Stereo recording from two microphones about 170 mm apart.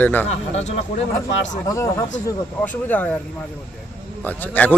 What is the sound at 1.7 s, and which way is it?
A man's voice, 15° left (ahead or behind).